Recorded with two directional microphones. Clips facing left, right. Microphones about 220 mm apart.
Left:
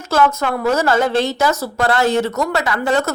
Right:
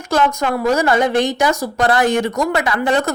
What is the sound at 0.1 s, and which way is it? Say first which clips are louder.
A woman's voice: even; 15° right (ahead or behind).